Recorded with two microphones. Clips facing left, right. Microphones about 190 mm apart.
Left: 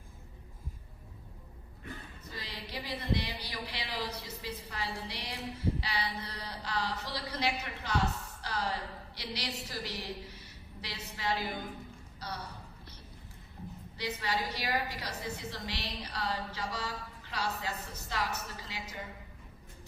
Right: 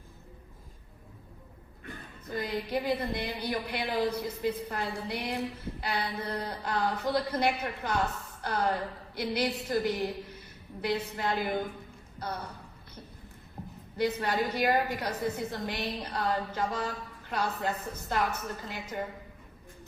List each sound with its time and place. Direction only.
2.3 s a woman's voice: 55° right (ahead or behind)
12.2 s a sound: 55° right (ahead or behind)
13.9 s a woman's voice: 55° right (ahead or behind)